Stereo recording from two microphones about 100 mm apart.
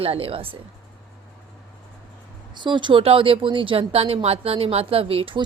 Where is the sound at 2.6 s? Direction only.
50° right (ahead or behind).